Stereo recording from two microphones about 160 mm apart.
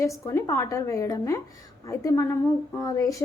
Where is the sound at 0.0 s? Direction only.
20° left (ahead or behind).